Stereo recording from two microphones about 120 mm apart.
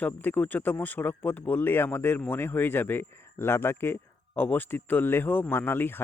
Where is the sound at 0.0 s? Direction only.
15° left (ahead or behind).